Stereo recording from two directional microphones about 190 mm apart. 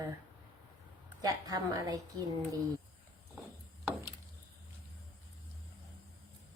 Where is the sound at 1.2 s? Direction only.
20° right (ahead or behind).